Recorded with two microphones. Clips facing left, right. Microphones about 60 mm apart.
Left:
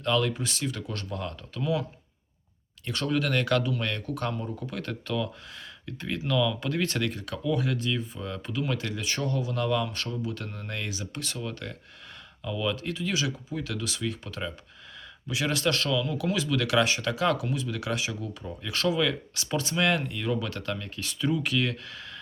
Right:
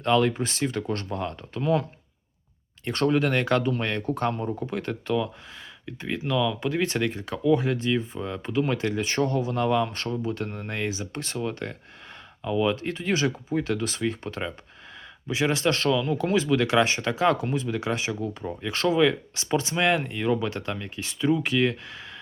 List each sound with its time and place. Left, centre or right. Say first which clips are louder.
0.0 s speech: right 5 dB; right
2.8 s speech: right 7 dB; right
3.1 s speech: right 2 dB; right